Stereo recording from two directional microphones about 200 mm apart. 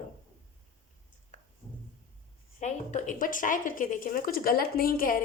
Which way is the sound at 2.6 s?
35° left (ahead or behind).